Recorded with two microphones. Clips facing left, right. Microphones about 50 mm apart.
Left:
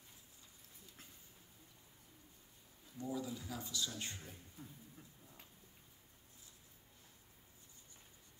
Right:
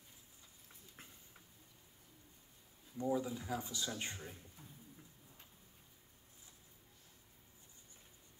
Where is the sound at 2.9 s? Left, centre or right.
Right.